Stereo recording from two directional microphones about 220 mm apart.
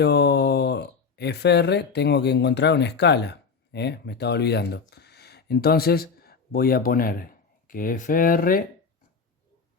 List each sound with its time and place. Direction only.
0.0 s speech: 50° left (ahead or behind)